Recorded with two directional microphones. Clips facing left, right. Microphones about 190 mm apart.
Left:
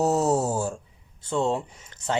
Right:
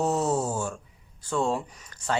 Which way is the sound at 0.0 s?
40° left (ahead or behind).